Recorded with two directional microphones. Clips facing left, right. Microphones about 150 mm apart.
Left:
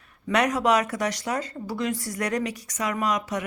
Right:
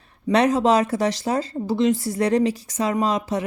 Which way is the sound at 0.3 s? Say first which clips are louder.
Right 4 dB; 30° right (ahead or behind).